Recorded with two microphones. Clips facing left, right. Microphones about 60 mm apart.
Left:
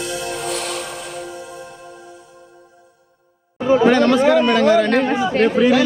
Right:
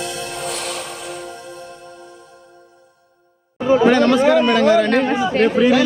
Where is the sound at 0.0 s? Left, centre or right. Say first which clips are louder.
Left 1 dB; centre.